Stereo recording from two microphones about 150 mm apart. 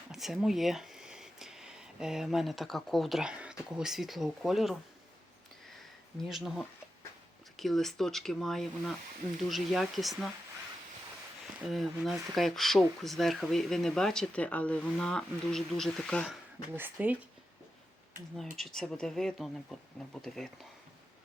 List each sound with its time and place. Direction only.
0.1 s speech: 5° right (ahead or behind)
6.2 s speech: centre (ahead or behind)
11.6 s speech: centre (ahead or behind)
16.7 s speech: 10° right (ahead or behind)
18.5 s speech: centre (ahead or behind)